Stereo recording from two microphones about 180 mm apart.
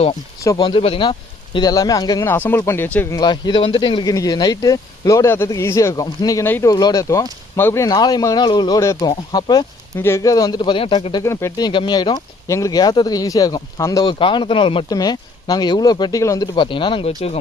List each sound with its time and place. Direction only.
0.4 s speech: 25° left (ahead or behind)
3.2 s speech: 25° left (ahead or behind)